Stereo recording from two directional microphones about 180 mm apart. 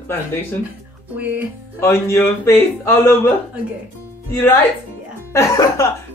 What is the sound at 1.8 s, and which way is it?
A man's voice, 15° left (ahead or behind).